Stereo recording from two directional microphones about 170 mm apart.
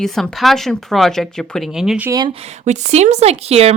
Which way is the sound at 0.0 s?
Centre (ahead or behind).